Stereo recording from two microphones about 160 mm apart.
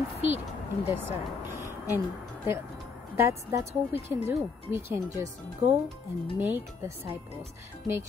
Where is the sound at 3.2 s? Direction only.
20° right (ahead or behind).